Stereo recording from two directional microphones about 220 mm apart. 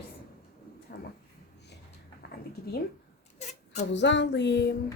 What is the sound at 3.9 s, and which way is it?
Speech, 55° left (ahead or behind).